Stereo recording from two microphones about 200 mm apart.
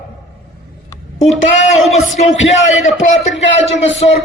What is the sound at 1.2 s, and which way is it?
Speech, 35° left (ahead or behind).